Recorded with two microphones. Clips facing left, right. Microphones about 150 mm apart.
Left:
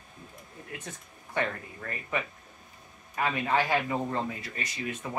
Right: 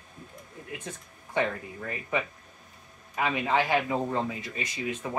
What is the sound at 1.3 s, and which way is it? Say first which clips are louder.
Speech: right 3 dB; 15° right (ahead or behind).